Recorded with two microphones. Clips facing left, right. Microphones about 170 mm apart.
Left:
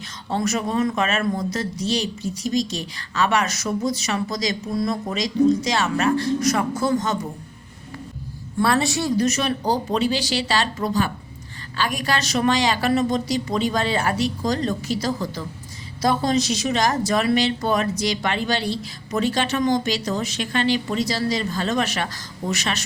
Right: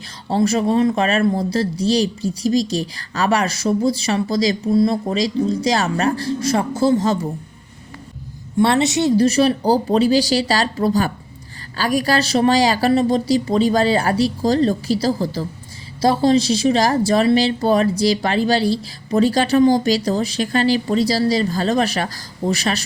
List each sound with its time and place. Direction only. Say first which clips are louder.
0.3 s speech: right 6 dB; 30° right (ahead or behind)
8.5 s speech: right 5 dB; 25° right (ahead or behind)